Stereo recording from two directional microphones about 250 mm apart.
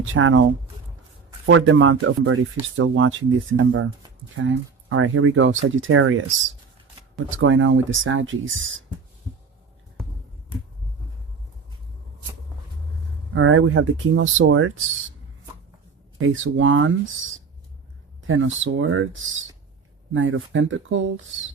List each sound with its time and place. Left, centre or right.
0.0 s speech: right
1.5 s speech: right
7.3 s speech: right
13.3 s speech: right
16.2 s speech: right